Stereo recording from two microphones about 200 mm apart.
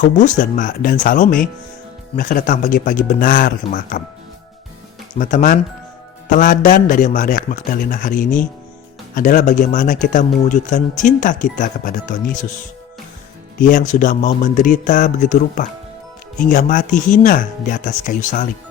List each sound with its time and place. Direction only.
0.0 s speech: 40° left (ahead or behind)
5.1 s speech: 40° left (ahead or behind)
13.6 s speech: 40° left (ahead or behind)